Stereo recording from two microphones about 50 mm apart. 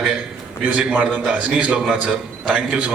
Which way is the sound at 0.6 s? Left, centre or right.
Right.